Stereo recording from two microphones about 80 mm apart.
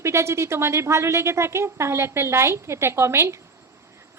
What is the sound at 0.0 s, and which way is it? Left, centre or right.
A woman's voice, right.